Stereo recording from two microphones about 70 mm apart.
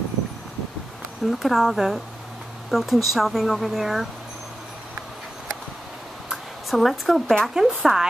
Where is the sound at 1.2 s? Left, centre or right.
Centre.